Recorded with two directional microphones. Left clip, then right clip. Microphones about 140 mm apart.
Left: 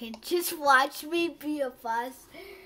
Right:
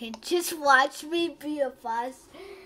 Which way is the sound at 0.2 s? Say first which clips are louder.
Right 2 dB; 20° right (ahead or behind).